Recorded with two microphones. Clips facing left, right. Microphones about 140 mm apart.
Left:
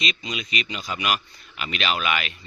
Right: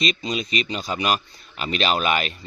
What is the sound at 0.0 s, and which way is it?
Speech, 35° right (ahead or behind).